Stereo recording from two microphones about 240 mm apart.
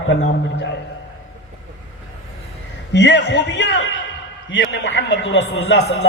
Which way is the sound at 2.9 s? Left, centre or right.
Left.